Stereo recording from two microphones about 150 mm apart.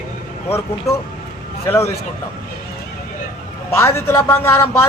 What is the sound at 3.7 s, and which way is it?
Speech, 15° left (ahead or behind).